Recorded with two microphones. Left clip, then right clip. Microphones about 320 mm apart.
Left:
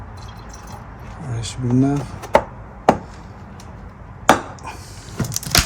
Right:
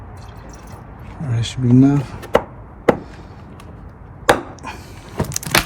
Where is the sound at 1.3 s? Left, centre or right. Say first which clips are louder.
Right 4 dB; right.